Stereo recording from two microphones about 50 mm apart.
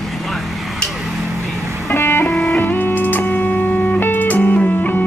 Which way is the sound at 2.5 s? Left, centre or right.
Left.